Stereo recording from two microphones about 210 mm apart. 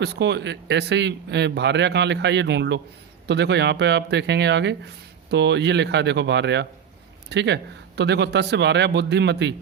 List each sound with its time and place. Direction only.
0.0 s speech: 55° right (ahead or behind)